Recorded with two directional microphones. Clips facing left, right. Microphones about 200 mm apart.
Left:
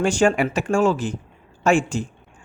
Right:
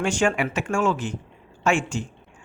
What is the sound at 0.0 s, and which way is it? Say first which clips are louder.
Speech: left 4 dB; 35° left (ahead or behind).